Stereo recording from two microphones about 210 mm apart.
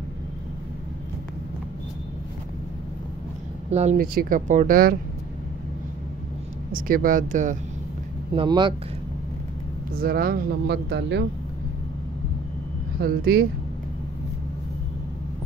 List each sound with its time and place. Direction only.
3.7 s speech: 35° right (ahead or behind)
6.7 s speech: 40° right (ahead or behind)
8.4 s speech: 20° right (ahead or behind)
9.9 s speech: 45° right (ahead or behind)
13.0 s speech: 45° right (ahead or behind)